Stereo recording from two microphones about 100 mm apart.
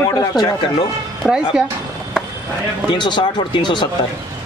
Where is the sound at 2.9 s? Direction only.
50° left (ahead or behind).